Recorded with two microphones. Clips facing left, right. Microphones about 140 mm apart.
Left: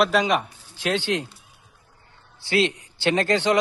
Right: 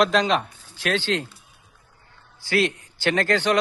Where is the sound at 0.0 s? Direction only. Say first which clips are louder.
Even; 10° left (ahead or behind).